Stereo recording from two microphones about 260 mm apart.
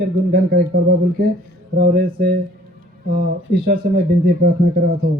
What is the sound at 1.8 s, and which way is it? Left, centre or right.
Speech, right.